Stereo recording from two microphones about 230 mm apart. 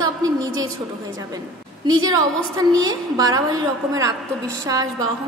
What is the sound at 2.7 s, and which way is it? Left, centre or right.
Speech, centre.